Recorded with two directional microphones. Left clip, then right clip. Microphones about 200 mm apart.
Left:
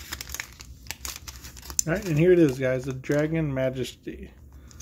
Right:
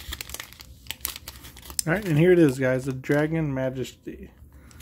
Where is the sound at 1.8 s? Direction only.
15° right (ahead or behind).